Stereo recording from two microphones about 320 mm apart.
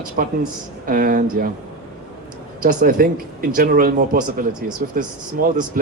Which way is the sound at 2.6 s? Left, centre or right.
Right.